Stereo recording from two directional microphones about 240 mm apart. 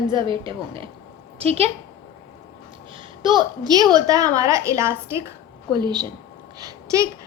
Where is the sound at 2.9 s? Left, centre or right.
Centre.